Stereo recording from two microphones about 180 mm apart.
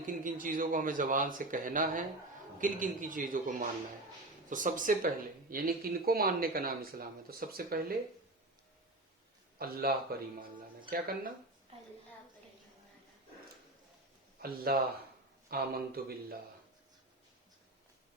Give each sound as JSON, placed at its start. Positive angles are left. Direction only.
{"t": 0.0, "sound": "speech", "side_deg": -50}
{"t": 9.6, "sound": "speech", "side_deg": -55}
{"t": 14.5, "sound": "speech", "side_deg": -55}